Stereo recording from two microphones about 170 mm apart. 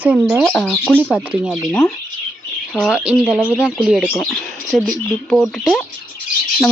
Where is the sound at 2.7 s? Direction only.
5° right (ahead or behind).